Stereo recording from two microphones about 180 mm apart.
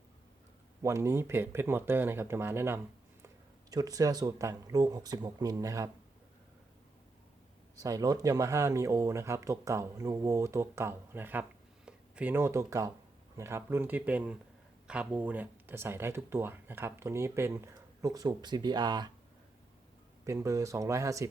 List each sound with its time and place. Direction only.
0.8 s speech: 15° right (ahead or behind)
7.8 s speech: 20° right (ahead or behind)
20.2 s speech: 15° right (ahead or behind)